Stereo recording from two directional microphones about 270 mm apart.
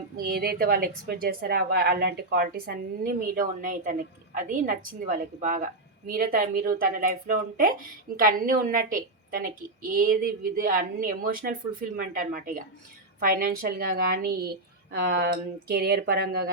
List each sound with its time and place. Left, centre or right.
0.3 s a woman's voice: right